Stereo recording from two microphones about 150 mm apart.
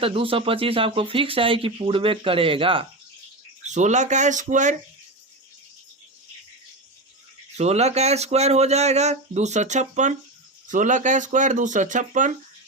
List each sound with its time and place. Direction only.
0.0 s speech: 40° right (ahead or behind)
3.7 s speech: 50° right (ahead or behind)
7.5 s speech: 45° right (ahead or behind)